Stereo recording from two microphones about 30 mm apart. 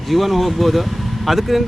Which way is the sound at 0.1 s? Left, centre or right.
Centre.